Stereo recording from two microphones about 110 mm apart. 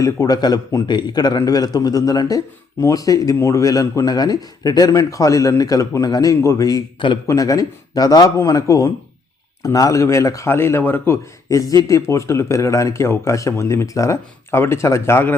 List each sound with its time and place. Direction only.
0.0 s a man's voice: 35° left (ahead or behind)